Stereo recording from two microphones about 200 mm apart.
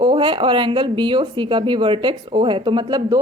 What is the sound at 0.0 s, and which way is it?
Speech, 20° right (ahead or behind).